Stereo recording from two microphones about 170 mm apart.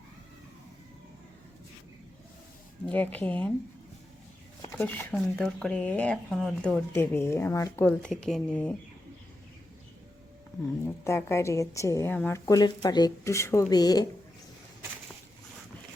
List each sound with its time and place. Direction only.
2.9 s speech: 10° left (ahead or behind)
4.7 s speech: 10° left (ahead or behind)
7.9 s speech: 5° left (ahead or behind)
10.8 s speech: 15° left (ahead or behind)
12.5 s speech: 25° left (ahead or behind)